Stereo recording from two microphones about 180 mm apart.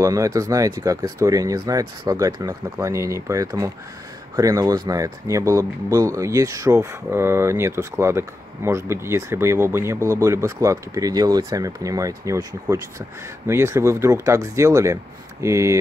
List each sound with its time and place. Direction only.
0.0 s speech: 20° right (ahead or behind)